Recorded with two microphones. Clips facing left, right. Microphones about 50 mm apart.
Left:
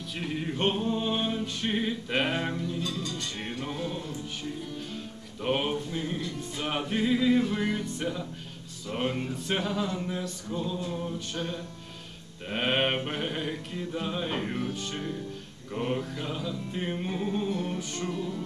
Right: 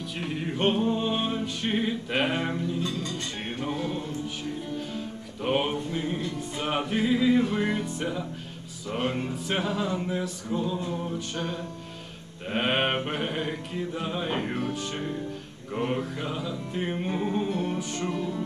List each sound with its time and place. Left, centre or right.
0.6 s music: centre
2.5 s mantra: centre
2.8 s speech: right
3.6 s speech: centre
4.7 s music: centre
5.9 s mantra: centre
9.3 s music: centre
9.8 s mantra: centre
11.1 s music: centre
12.4 s mantra: centre
14.6 s music: centre
14.9 s mantra: centre
17.5 s speech: right